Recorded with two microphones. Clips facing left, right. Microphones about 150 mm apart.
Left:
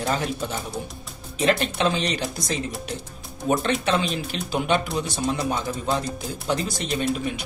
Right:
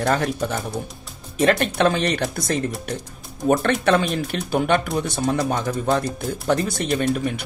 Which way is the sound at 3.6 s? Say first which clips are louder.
Right 4 dB; 55° right (ahead or behind).